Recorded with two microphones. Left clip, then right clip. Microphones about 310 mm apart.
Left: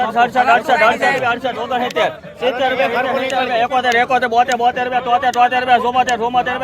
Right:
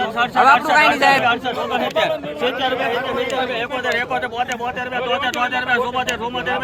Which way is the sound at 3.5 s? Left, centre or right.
Centre.